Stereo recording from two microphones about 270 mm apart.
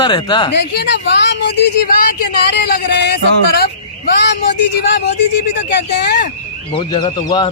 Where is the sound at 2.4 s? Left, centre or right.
Left.